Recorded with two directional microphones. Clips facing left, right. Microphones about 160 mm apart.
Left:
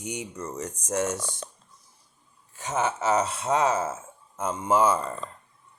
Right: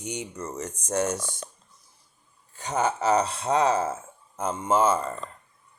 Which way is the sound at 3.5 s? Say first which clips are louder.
Right 1 dB; 35° right (ahead or behind).